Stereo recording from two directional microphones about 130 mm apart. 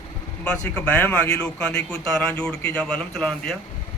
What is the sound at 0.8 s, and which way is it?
A man's voice, 10° left (ahead or behind).